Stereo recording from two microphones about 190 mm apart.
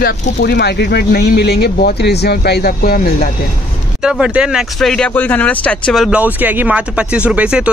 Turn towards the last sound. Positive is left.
turn(degrees=-5)  # may be behind; listen again after turning